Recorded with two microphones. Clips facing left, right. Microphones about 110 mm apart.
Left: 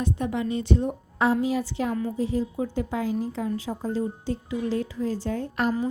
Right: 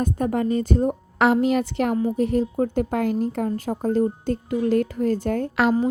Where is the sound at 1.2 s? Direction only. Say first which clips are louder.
Right 5 dB; 75° right (ahead or behind); by 5.5 s 55° right (ahead or behind).